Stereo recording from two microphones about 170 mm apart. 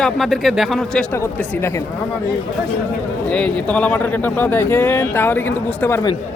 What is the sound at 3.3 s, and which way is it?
Speech, 5° left (ahead or behind).